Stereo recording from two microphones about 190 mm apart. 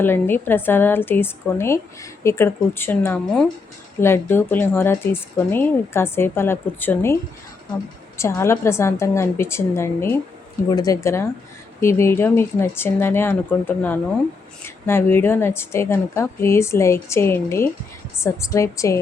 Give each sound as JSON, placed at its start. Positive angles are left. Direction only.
{"t": 0.0, "sound": "a woman's voice", "side_deg": 10}
{"t": 8.2, "sound": "a woman's voice", "side_deg": 15}